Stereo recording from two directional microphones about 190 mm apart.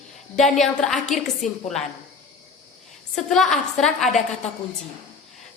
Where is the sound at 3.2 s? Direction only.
Centre (ahead or behind).